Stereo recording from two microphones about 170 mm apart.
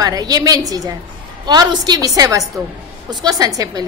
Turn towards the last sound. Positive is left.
turn(degrees=-20)  # may be behind; listen again after turning